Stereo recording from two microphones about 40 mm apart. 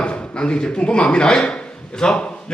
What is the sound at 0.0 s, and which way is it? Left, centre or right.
Speech, left.